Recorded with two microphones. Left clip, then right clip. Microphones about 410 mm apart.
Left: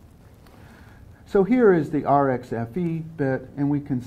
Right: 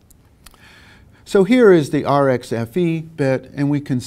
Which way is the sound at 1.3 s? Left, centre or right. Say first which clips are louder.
Right 6 dB; right.